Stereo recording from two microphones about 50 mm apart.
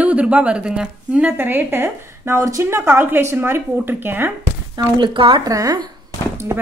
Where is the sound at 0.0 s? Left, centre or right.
Right.